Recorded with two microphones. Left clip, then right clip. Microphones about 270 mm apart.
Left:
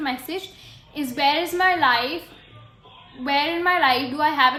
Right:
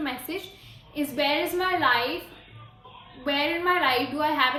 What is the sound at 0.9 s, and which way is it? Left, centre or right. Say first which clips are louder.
A woman's voice: left 4 dB; left.